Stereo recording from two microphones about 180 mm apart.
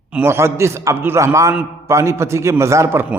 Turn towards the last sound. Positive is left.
turn(degrees=-10)  # may be behind; listen again after turning